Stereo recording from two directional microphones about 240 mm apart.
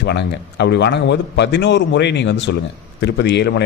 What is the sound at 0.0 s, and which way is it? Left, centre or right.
Speech, left.